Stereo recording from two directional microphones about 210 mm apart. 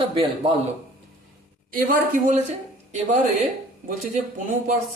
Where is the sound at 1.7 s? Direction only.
40° right (ahead or behind).